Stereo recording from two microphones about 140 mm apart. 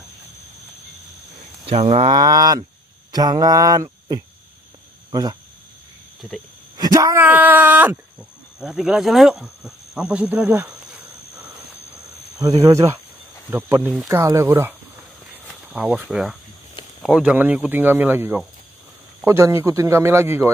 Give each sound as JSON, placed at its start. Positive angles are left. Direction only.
{"t": 1.7, "sound": "speech", "side_deg": -45}
{"t": 2.1, "sound": "speech", "side_deg": -25}
{"t": 3.1, "sound": "a sound", "side_deg": -30}
{"t": 5.1, "sound": "speech", "side_deg": -25}
{"t": 6.2, "sound": "speech", "side_deg": -10}
{"t": 6.8, "sound": "speech", "side_deg": -25}
{"t": 12.4, "sound": "speech", "side_deg": -25}
{"t": 15.3, "sound": "cricket", "side_deg": -5}
{"t": 17.0, "sound": "speech", "side_deg": -5}